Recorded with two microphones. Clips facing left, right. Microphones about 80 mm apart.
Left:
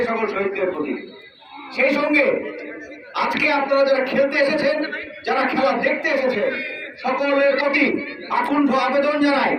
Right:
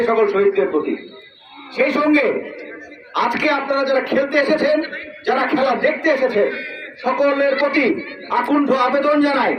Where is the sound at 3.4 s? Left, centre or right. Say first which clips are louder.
Left 1 dB; right.